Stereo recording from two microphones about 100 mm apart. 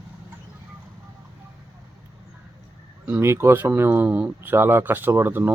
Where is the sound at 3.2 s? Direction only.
25° right (ahead or behind).